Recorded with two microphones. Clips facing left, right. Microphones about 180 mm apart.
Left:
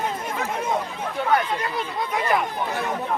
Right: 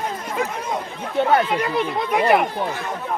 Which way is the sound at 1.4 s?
70° right (ahead or behind).